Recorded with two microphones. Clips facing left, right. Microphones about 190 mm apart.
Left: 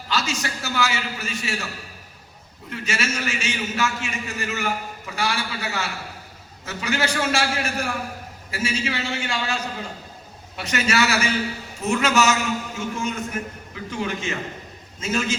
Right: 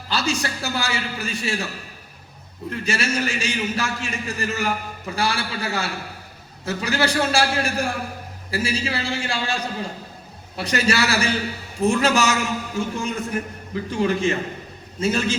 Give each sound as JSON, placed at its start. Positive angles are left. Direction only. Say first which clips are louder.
{"t": 0.1, "sound": "a man's voice", "louder": "right 2 dB", "side_deg": -35}
{"t": 2.8, "sound": "a man's voice", "louder": "right 3 dB", "side_deg": -35}